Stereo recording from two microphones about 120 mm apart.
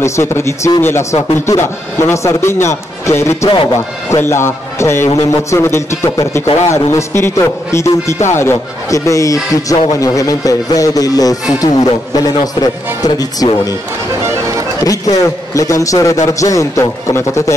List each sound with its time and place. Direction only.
0.0 s a man's voice: 25° left (ahead or behind)
14.9 s a man's voice: 30° left (ahead or behind)